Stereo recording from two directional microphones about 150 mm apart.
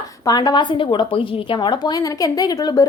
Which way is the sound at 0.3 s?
30° left (ahead or behind).